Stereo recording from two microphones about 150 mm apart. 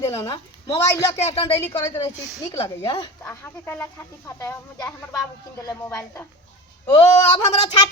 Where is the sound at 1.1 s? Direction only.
45° left (ahead or behind).